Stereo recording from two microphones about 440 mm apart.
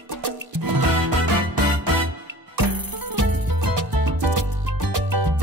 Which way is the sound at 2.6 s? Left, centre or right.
Right.